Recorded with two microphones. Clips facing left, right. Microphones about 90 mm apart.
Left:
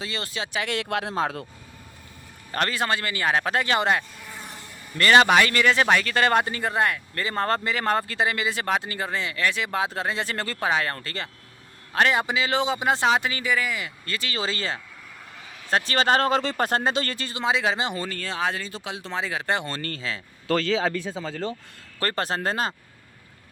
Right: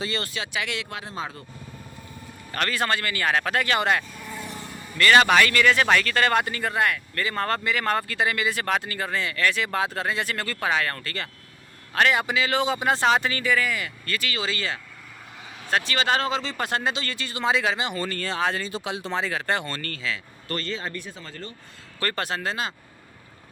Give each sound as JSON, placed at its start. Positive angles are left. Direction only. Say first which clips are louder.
{"t": 0.3, "sound": "speech", "louder": "left 2 dB", "side_deg": 35}
{"t": 0.8, "sound": "speech", "louder": "left 7 dB", "side_deg": 70}
{"t": 2.5, "sound": "a man's voice", "louder": "left 2 dB", "side_deg": 30}
{"t": 2.7, "sound": "a man's voice", "louder": "even", "side_deg": 20}
{"t": 17.3, "sound": "a man's voice", "louder": "even", "side_deg": 20}
{"t": 17.9, "sound": "speech", "louder": "right 2 dB", "side_deg": 5}
{"t": 19.2, "sound": "a man's voice", "louder": "left 3 dB", "side_deg": 15}
{"t": 20.6, "sound": "speech", "louder": "left 7 dB", "side_deg": 90}
{"t": 22.0, "sound": "speech", "louder": "left 2 dB", "side_deg": 35}